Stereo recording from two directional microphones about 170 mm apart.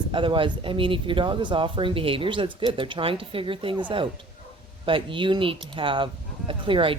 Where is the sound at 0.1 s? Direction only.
30° right (ahead or behind).